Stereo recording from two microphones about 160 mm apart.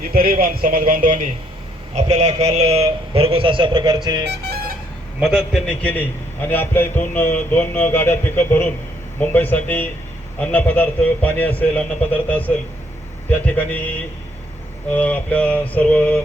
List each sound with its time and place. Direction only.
0.1 s speech: 70° right (ahead or behind)
2.0 s a man's voice: 45° right (ahead or behind); by 4.3 s 25° right (ahead or behind)
5.2 s a man's voice: centre (ahead or behind)
5.8 s speech: 10° left (ahead or behind)